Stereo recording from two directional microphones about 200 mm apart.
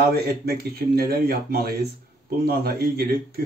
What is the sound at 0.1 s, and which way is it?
Speech, 50° right (ahead or behind).